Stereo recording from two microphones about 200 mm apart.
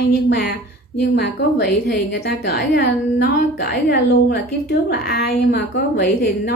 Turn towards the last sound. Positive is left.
turn(degrees=50)  # may be behind; listen again after turning